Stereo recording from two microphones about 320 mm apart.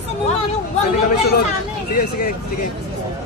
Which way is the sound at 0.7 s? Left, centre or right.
Centre.